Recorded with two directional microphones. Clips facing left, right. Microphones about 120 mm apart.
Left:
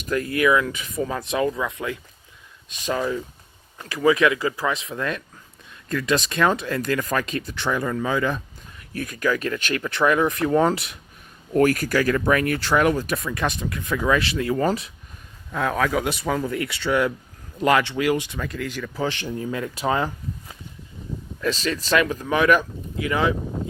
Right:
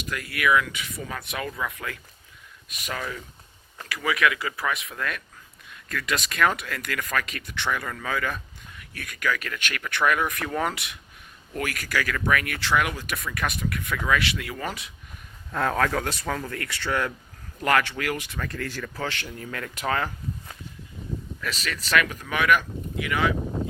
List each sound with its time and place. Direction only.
0.1 s speech: 30° left (ahead or behind)
15.5 s speech: 5° left (ahead or behind)
19.0 s speech: 20° left (ahead or behind)
21.4 s speech: 30° left (ahead or behind)